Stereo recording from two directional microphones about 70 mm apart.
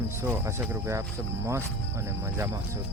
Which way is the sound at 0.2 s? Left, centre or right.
Right.